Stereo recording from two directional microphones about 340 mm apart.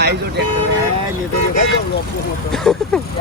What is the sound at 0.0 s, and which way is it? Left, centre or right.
Speech, right.